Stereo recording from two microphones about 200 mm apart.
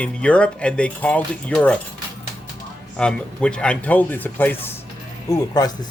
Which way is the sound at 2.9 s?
5° left (ahead or behind).